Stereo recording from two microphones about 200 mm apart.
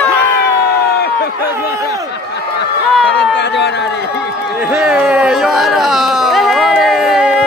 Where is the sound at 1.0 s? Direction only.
50° left (ahead or behind).